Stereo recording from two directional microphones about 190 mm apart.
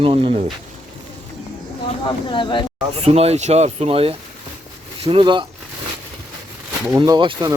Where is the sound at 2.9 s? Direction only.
30° right (ahead or behind).